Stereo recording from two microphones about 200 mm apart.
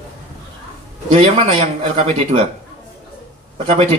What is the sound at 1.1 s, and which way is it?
Speech, 30° right (ahead or behind).